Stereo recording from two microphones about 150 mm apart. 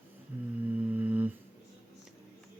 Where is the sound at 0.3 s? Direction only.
15° right (ahead or behind).